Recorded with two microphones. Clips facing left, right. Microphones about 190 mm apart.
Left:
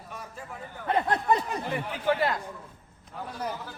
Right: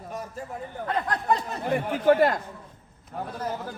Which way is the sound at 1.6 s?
50° right (ahead or behind).